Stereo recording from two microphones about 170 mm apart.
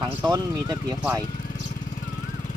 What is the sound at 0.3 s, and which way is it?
Speech, 25° right (ahead or behind).